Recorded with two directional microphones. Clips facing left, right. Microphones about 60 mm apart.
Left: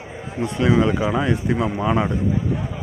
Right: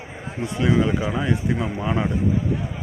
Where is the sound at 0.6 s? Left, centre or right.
Left.